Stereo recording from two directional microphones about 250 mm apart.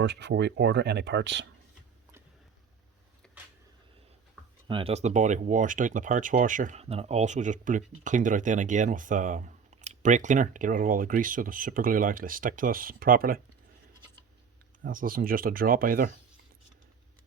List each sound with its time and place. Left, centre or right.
0.0 s speech: right
3.2 s a sound: centre
4.7 s speech: right
14.8 s speech: right